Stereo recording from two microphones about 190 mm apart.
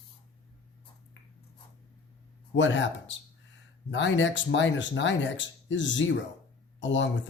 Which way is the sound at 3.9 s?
70° left (ahead or behind).